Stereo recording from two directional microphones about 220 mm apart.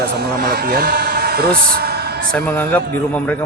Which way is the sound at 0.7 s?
45° right (ahead or behind).